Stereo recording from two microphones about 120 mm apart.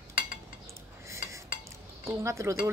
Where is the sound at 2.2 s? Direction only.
25° right (ahead or behind).